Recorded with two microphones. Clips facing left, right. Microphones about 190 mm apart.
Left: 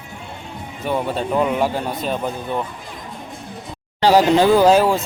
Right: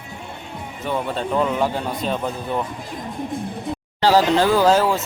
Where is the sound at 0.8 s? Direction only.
10° left (ahead or behind).